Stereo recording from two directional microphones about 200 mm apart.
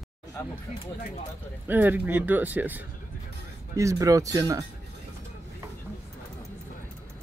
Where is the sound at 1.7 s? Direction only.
10° right (ahead or behind).